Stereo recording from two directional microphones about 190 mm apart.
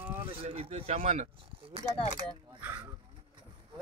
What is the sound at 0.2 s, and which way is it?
Speech, 30° right (ahead or behind).